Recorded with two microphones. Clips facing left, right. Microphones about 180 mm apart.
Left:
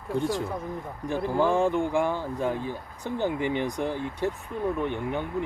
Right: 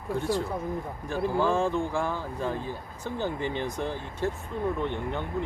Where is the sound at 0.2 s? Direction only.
15° left (ahead or behind).